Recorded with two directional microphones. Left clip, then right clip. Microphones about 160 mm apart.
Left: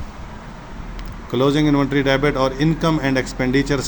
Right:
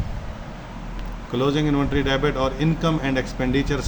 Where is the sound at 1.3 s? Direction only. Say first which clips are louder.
Left 5 dB; 40° left (ahead or behind).